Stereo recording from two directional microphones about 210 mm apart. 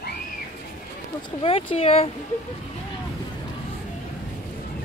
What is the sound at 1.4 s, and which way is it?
Speech, 25° left (ahead or behind).